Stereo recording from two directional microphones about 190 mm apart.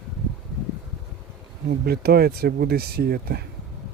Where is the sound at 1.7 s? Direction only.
55° right (ahead or behind).